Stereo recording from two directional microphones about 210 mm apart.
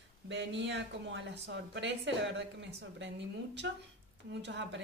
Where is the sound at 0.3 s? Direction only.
55° right (ahead or behind).